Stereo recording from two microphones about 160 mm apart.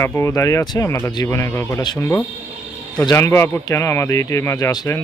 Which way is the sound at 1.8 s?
25° left (ahead or behind).